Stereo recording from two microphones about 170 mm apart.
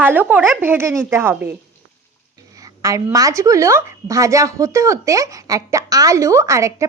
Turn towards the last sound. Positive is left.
turn(degrees=-15)  # may be behind; listen again after turning